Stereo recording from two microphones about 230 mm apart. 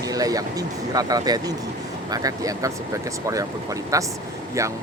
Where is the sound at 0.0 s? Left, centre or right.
Centre.